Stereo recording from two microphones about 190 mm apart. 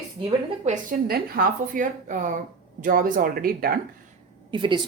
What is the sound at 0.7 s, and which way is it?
Speech, 45° right (ahead or behind).